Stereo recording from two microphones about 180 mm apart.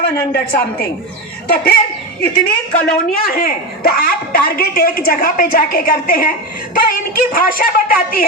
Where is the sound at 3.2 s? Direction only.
55° left (ahead or behind).